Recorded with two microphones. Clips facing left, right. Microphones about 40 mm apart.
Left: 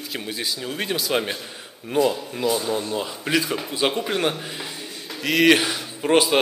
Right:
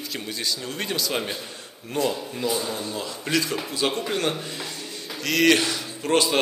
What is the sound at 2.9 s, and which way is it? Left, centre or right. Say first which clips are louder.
A man's voice: left 3 dB; centre.